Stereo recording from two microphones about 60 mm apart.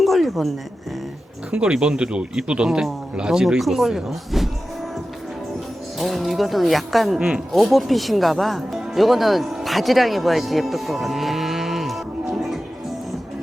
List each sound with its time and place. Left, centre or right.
0.0 s a sound: centre
1.5 s speech: centre
6.0 s speech: centre
7.2 s speech: centre
7.5 s speech: centre